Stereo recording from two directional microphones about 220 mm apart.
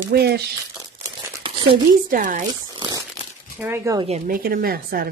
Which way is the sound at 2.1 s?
35° right (ahead or behind).